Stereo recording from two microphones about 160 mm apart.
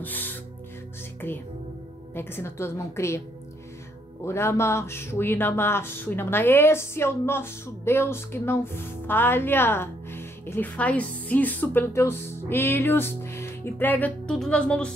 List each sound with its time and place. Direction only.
0.0 s music: 10° left (ahead or behind)
2.1 s speech: 15° left (ahead or behind)
4.2 s speech: 15° left (ahead or behind)